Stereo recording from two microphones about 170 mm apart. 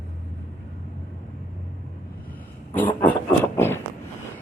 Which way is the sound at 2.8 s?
10° left (ahead or behind).